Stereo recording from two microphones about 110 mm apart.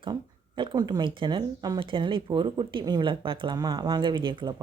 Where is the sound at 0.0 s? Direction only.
45° right (ahead or behind).